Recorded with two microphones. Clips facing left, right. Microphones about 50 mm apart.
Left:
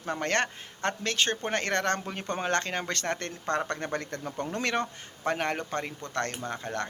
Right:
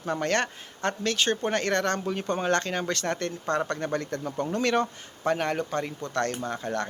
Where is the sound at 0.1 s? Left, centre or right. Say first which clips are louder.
Right 2 dB; left.